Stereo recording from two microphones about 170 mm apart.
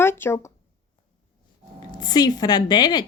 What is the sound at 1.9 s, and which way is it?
A woman's voice, 25° left (ahead or behind).